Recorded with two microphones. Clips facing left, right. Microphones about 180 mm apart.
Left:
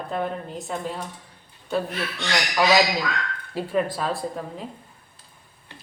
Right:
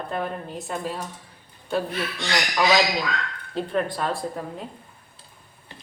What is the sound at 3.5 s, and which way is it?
Speech, 5° left (ahead or behind).